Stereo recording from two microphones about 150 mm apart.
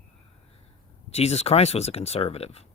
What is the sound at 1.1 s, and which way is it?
Speech, 45° left (ahead or behind).